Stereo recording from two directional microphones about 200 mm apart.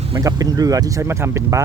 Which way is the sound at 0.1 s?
15° right (ahead or behind).